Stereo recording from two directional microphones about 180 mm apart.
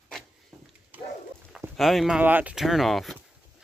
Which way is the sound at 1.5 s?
Centre (ahead or behind).